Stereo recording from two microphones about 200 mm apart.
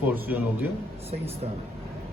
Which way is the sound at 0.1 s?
10° right (ahead or behind).